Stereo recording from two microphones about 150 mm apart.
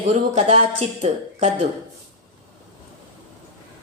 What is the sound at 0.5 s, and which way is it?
Speech, 55° right (ahead or behind).